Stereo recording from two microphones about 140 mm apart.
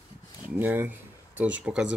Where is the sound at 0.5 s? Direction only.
10° right (ahead or behind).